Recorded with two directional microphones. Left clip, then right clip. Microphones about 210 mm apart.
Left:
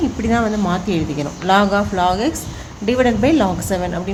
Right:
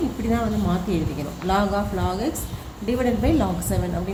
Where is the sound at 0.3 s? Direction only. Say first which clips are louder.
Left 8 dB; 45° left (ahead or behind).